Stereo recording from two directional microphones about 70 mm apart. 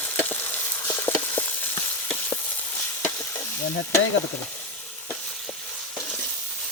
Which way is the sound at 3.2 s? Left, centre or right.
Left.